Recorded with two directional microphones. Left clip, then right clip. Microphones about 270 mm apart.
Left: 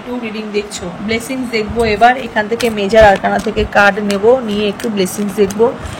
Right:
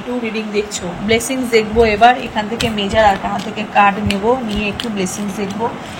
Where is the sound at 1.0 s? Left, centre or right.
Centre.